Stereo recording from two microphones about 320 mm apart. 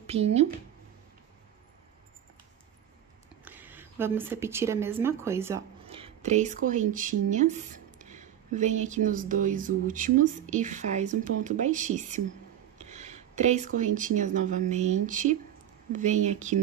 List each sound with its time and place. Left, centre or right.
0.0 s speech: centre
3.4 s speech: centre; by 16.5 s right